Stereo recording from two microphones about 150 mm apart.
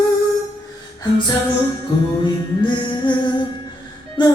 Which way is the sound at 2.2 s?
30° left (ahead or behind).